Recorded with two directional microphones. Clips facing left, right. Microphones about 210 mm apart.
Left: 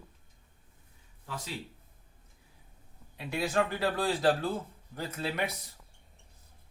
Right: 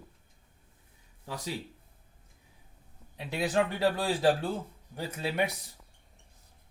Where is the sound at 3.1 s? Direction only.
20° right (ahead or behind).